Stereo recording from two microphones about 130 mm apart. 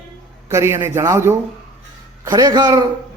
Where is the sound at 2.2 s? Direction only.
30° right (ahead or behind).